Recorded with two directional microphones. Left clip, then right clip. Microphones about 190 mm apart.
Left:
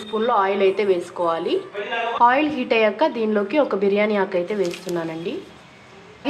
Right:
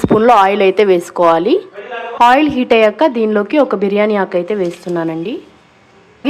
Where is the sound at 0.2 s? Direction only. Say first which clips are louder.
Right 8 dB; 55° right (ahead or behind).